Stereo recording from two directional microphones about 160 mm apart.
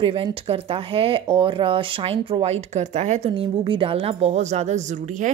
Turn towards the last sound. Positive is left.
turn(degrees=-45)  # may be behind; listen again after turning